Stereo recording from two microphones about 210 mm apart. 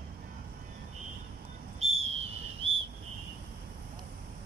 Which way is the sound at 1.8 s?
30° right (ahead or behind).